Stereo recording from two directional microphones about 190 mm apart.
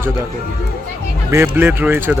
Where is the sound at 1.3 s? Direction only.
10° right (ahead or behind).